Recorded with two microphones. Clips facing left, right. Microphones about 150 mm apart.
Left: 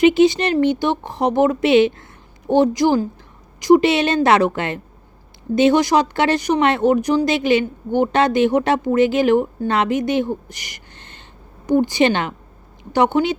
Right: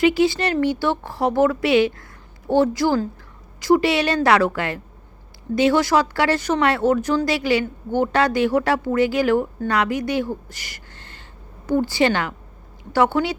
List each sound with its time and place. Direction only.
0.0 s a woman's voice: 20° left (ahead or behind)